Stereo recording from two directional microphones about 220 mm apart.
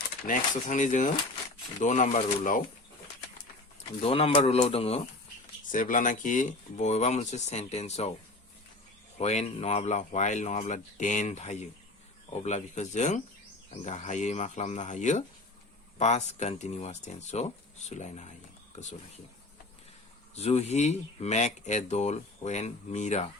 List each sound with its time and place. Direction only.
0.3 s speech: 35° left (ahead or behind)
4.0 s a man's voice: 25° left (ahead or behind)
5.7 s speech: 35° left (ahead or behind)
9.1 s speech: 30° left (ahead or behind)
20.3 s speech: 30° left (ahead or behind)